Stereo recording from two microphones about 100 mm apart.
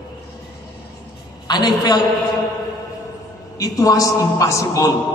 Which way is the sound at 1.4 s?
45° left (ahead or behind).